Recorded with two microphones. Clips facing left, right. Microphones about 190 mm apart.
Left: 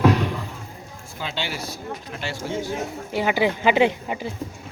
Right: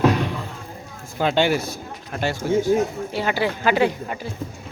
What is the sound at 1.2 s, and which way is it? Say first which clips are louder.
A man's voice: right 11 dB; 50° right (ahead or behind).